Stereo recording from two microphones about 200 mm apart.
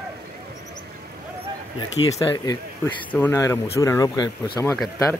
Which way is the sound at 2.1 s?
25° left (ahead or behind).